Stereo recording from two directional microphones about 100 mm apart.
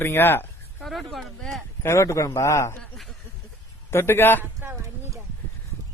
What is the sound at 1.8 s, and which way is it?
Speech, 30° left (ahead or behind).